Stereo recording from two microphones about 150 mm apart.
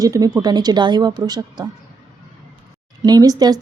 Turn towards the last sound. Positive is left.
turn(degrees=-25)  # may be behind; listen again after turning